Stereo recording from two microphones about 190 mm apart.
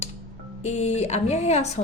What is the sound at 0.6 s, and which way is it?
Speech, 35° left (ahead or behind).